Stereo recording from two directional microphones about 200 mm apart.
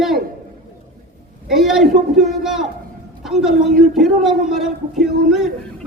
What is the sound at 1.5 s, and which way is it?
A man's voice, centre (ahead or behind).